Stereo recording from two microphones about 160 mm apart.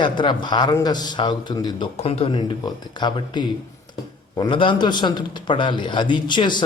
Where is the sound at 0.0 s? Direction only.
30° left (ahead or behind).